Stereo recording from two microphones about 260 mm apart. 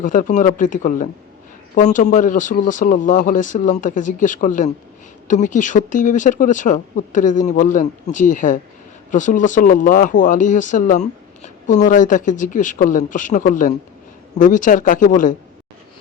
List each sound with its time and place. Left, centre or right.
0.0 s speech: left